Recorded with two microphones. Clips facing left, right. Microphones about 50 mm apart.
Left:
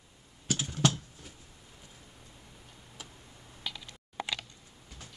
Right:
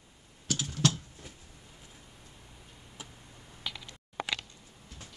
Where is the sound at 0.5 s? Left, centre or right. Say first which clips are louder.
Left 1 dB; centre.